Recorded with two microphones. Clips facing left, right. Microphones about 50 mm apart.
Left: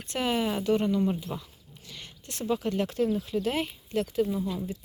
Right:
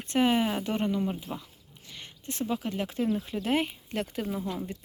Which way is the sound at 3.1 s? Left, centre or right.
Right.